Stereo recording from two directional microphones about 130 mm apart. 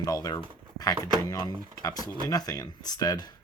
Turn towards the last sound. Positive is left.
turn(degrees=30)  # may be behind; listen again after turning